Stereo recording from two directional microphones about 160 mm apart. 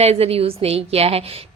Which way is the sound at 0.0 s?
40° right (ahead or behind).